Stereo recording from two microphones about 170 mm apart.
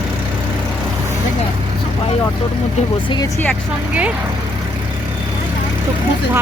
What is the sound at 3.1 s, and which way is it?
Speech, 25° left (ahead or behind).